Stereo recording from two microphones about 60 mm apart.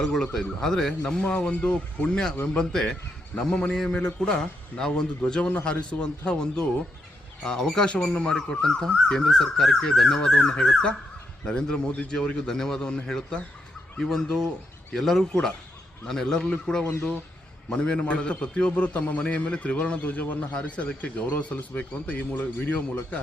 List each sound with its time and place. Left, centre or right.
0.0 s a man's voice: centre
2.3 s a man's voice: left
2.6 s a man's voice: centre
7.9 s a man's voice: centre